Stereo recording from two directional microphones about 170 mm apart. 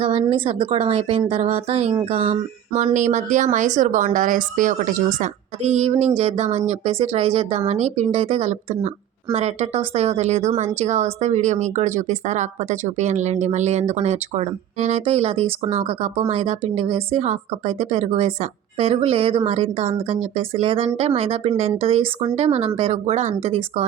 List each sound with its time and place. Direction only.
0.0 s a woman's voice: 30° right (ahead or behind)